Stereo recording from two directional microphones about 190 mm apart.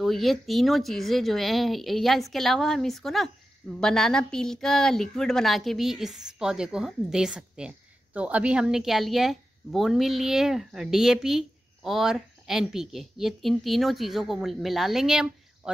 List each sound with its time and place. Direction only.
0.0 s a woman's voice: centre (ahead or behind)